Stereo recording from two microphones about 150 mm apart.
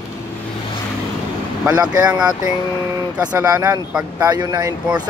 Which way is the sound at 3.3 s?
25° right (ahead or behind).